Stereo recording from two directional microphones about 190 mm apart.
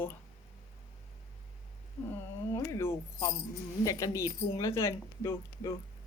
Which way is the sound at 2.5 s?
15° left (ahead or behind).